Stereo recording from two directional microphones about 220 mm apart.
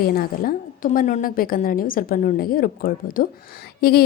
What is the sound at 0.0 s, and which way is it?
A woman's voice, 45° left (ahead or behind).